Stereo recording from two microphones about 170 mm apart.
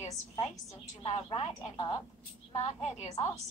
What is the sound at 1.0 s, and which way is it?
Speech, 30° left (ahead or behind).